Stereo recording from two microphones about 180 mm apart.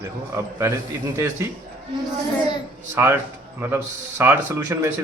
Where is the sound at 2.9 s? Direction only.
15° right (ahead or behind).